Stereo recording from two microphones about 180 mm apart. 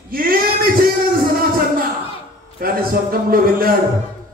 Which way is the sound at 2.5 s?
55° right (ahead or behind).